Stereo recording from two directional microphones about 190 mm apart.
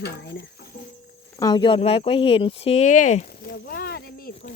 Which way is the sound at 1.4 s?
20° left (ahead or behind).